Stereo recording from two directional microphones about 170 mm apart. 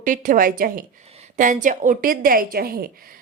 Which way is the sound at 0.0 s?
50° right (ahead or behind).